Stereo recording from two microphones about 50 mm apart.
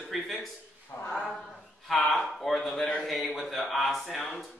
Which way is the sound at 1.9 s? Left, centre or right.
Centre.